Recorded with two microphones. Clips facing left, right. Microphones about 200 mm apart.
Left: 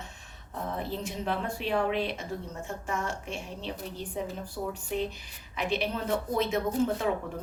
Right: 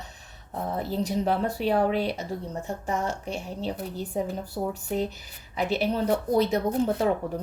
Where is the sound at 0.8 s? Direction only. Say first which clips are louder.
Right 10 dB; 40° right (ahead or behind).